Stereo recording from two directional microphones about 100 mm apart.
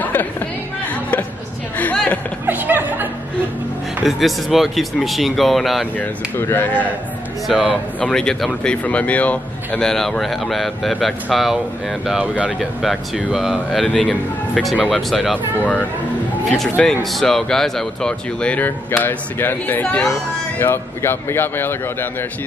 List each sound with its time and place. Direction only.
0.0 s chatter: 15° left (ahead or behind)
1.8 s a sound: 15° left (ahead or behind)
2.4 s music: 20° right (ahead or behind)
4.0 s speech: centre (ahead or behind)
5.9 s speech: 20° left (ahead or behind)
7.4 s speech: centre (ahead or behind)
15.3 s speech: 15° left (ahead or behind)
17.0 s speech: 5° left (ahead or behind); by 21.7 s 20° left (ahead or behind)